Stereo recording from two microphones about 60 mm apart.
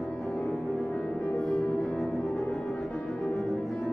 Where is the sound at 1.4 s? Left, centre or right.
Centre.